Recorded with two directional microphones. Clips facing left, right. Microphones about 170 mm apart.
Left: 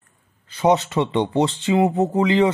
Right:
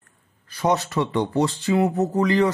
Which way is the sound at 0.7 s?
25° left (ahead or behind).